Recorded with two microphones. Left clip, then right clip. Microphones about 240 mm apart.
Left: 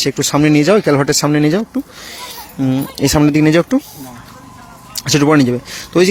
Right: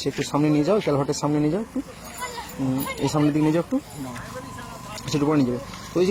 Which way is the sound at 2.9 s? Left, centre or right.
Left.